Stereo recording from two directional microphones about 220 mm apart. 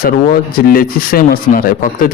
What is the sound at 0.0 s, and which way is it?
Speech, 40° left (ahead or behind).